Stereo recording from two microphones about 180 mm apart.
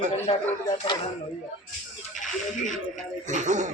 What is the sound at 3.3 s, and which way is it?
Speech, 40° right (ahead or behind).